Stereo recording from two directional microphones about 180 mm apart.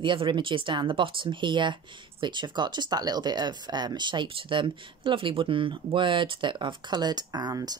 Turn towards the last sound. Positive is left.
turn(degrees=-20)  # may be behind; listen again after turning